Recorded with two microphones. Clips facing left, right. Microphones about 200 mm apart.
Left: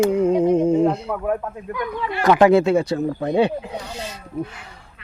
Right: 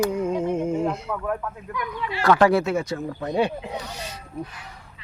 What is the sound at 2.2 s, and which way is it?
Speech, 20° left (ahead or behind).